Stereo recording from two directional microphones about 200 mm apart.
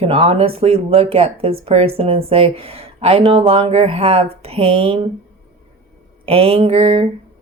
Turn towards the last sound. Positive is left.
turn(degrees=-30)  # may be behind; listen again after turning